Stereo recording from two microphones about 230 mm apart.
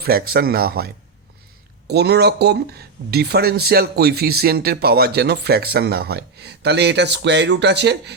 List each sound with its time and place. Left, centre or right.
0.0 s speech: right
1.9 s speech: right